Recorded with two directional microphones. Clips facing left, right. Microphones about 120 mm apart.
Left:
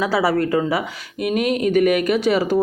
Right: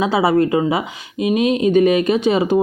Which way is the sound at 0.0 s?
20° right (ahead or behind).